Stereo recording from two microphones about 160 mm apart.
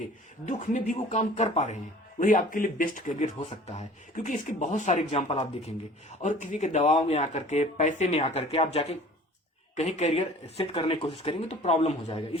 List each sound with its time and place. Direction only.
0.4 s speech: 50° left (ahead or behind)
3.4 s speech: 45° left (ahead or behind)
4.9 s speech: 40° left (ahead or behind)
6.1 s speech: 50° left (ahead or behind)